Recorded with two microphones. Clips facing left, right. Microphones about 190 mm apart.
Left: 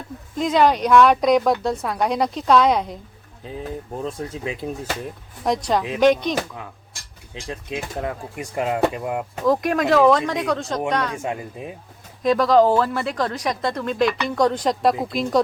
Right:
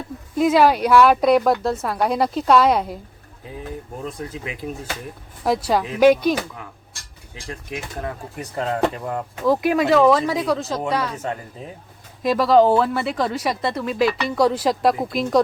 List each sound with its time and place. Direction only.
0.3 s speech: 5° right (ahead or behind)
4.3 s speech: 25° left (ahead or behind)
5.5 s speech: 5° right (ahead or behind)
7.3 s speech: 20° left (ahead or behind)
9.4 s speech: 5° right (ahead or behind)
11.2 s speech: 10° left (ahead or behind)
12.2 s speech: 5° right (ahead or behind)